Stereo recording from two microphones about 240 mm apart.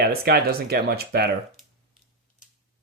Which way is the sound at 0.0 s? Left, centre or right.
Right.